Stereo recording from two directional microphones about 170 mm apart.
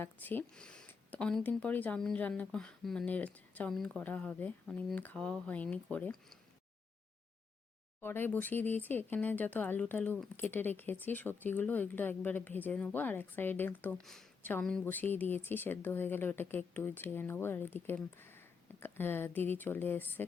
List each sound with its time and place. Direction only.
0.0 s speech: 10° left (ahead or behind)
8.0 s speech: 10° left (ahead or behind)